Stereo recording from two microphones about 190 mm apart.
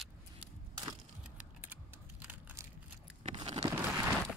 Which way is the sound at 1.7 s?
10° right (ahead or behind).